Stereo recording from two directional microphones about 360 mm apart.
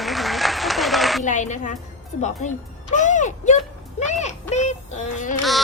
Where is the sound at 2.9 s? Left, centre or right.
Centre.